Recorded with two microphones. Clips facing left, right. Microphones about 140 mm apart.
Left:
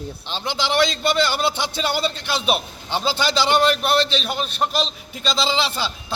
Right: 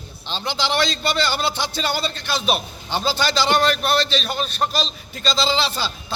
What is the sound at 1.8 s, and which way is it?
A man's voice, 15° left (ahead or behind).